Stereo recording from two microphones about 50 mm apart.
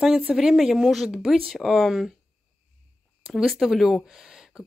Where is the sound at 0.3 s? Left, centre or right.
Centre.